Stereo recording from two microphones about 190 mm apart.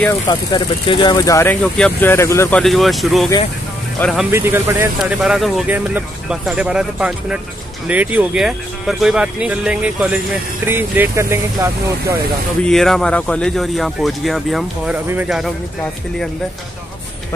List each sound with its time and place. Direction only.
0.3 s speech: 25° left (ahead or behind)
2.6 s speech: centre (ahead or behind)
4.3 s speech: 10° right (ahead or behind)
12.6 s speech: centre (ahead or behind)